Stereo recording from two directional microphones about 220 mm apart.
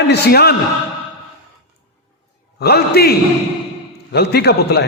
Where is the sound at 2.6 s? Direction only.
45° left (ahead or behind).